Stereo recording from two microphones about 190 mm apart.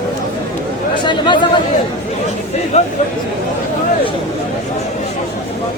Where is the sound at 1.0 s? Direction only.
25° left (ahead or behind).